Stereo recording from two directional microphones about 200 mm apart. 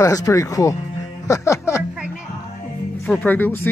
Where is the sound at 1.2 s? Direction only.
15° left (ahead or behind).